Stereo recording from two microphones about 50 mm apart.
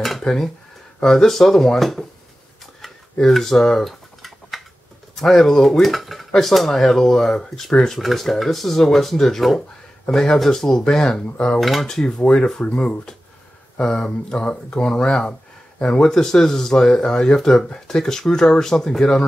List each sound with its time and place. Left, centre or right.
0.2 s speech: centre
4.5 s tick-tock: centre
5.1 s speech: centre
12.2 s speech: left